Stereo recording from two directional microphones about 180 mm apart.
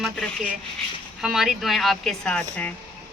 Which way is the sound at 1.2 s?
Centre (ahead or behind).